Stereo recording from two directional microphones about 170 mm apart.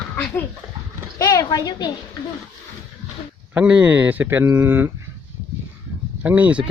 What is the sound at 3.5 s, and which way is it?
Speech, 10° right (ahead or behind).